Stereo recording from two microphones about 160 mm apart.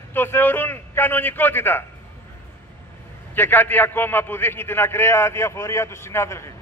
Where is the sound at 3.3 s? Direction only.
10° left (ahead or behind).